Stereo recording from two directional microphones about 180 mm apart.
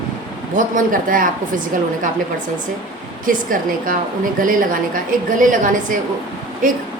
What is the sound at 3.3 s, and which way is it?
A woman's voice, 50° right (ahead or behind).